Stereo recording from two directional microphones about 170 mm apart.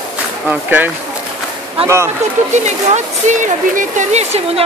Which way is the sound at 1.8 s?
35° right (ahead or behind).